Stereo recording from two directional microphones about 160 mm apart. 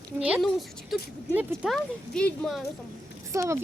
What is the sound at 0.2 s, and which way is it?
Speech, 10° right (ahead or behind).